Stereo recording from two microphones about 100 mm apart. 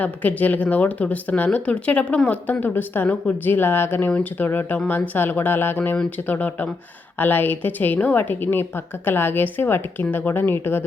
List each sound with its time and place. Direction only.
0.0 s a woman's voice: 15° left (ahead or behind)